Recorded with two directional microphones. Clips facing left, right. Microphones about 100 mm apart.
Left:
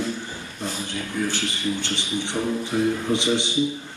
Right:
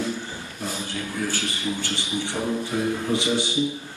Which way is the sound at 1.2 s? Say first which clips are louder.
Left 2 dB; 20° left (ahead or behind).